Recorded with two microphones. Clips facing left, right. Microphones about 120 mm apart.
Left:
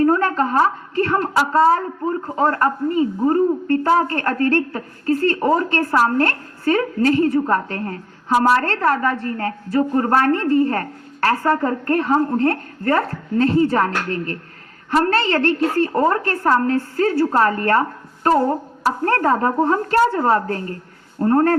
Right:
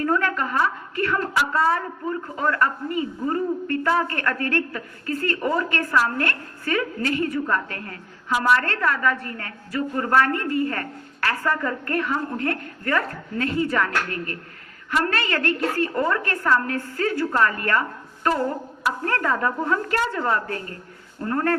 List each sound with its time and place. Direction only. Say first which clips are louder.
0.0 s a woman's voice: left 6 dB; 35° left (ahead or behind)